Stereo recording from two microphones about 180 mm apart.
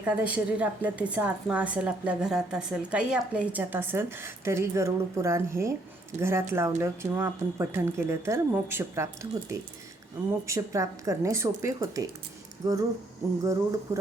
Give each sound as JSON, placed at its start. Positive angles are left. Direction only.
{"t": 0.0, "sound": "a woman's voice", "side_deg": -5}
{"t": 10.4, "sound": "a woman's voice", "side_deg": -15}